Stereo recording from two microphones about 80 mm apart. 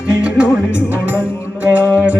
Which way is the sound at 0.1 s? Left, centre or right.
Centre.